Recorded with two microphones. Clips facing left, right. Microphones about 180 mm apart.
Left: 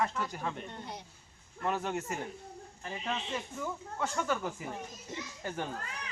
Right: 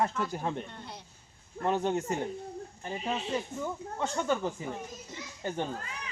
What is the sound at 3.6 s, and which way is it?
Speech, 25° right (ahead or behind).